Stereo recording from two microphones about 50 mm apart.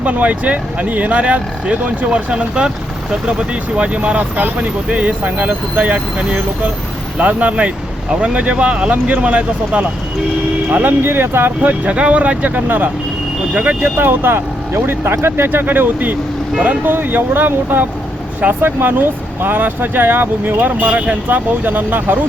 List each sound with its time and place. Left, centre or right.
0.0 s speech: right
10.7 s speech: right
11.6 s speech: right
13.5 s speech: right
13.8 s speech: right
15.4 s speech: right